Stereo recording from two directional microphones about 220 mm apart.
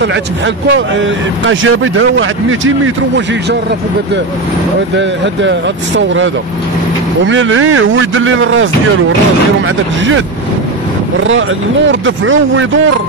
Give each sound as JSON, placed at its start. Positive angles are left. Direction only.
{"t": 0.7, "sound": "a man's voice", "side_deg": -60}
{"t": 4.9, "sound": "a man's voice", "side_deg": -55}
{"t": 11.9, "sound": "a man's voice", "side_deg": -65}